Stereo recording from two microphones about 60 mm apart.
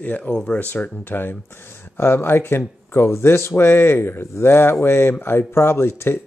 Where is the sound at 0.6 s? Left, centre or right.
Left.